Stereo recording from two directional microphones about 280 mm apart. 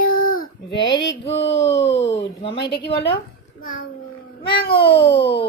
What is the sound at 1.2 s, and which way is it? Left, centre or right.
Speech, left.